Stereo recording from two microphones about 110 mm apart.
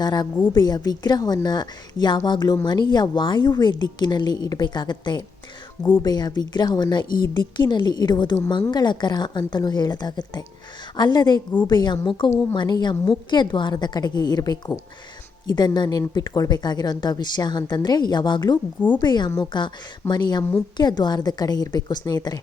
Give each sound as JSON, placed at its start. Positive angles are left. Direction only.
{"t": 0.0, "sound": "a woman's voice", "side_deg": 40}